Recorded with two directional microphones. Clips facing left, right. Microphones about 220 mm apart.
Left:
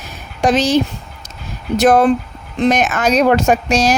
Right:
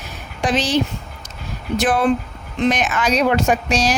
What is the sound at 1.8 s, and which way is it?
Speech, 40° left (ahead or behind).